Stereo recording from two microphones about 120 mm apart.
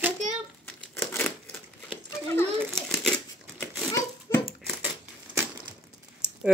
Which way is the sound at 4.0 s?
25° left (ahead or behind).